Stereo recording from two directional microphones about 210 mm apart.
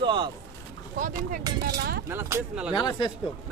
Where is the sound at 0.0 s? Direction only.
20° right (ahead or behind).